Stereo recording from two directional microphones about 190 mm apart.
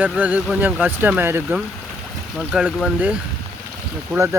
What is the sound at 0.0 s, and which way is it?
Speech, 10° right (ahead or behind).